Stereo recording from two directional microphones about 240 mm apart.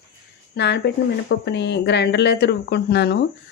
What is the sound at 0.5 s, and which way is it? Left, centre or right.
Speech, left.